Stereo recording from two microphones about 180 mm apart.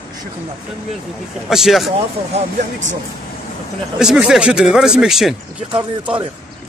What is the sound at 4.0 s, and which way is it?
Speech, 5° right (ahead or behind).